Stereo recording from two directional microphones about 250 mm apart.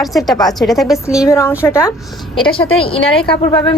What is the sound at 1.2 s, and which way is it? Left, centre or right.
Speech, centre.